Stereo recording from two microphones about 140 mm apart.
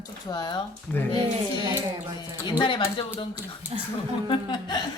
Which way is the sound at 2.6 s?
35° left (ahead or behind).